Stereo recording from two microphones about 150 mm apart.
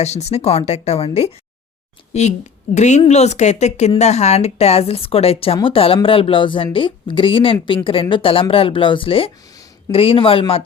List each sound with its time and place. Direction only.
0.0 s speech: 45° left (ahead or behind)
2.7 s speech: 50° left (ahead or behind)